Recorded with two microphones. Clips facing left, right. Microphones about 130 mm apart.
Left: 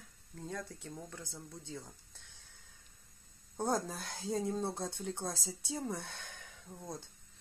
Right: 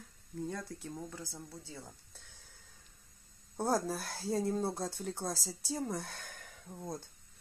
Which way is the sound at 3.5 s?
5° right (ahead or behind).